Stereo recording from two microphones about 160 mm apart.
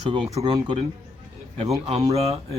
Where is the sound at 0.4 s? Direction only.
35° right (ahead or behind).